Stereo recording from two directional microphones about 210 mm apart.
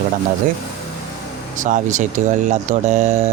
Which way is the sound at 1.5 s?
35° right (ahead or behind).